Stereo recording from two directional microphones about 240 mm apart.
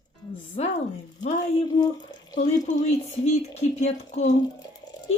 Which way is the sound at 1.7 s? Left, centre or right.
Centre.